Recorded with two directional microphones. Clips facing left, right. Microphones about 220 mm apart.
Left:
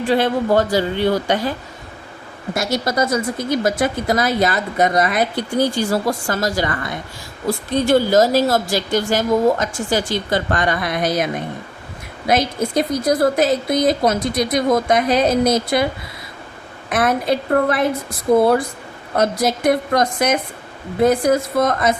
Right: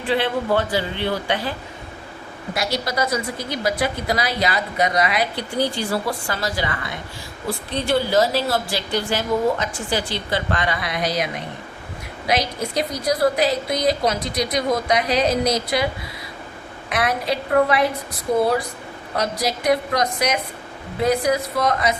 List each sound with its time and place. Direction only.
0.1 s a woman's voice: 45° left (ahead or behind)
2.6 s a woman's voice: 50° left (ahead or behind)
12.3 s a woman's voice: 50° left (ahead or behind)
16.9 s a woman's voice: 50° left (ahead or behind)
19.1 s a woman's voice: 50° left (ahead or behind)